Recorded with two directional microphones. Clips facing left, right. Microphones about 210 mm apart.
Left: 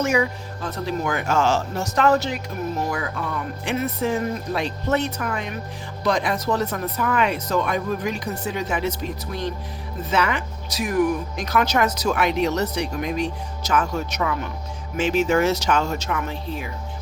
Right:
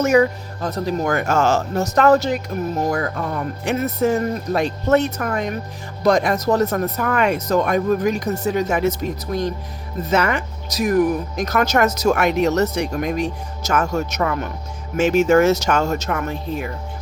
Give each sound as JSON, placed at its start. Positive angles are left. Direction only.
{"t": 0.0, "sound": "speech", "side_deg": -40}